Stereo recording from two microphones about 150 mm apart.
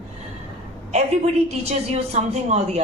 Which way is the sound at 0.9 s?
45° right (ahead or behind).